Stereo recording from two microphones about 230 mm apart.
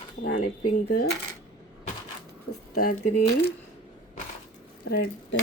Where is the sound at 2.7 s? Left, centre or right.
Left.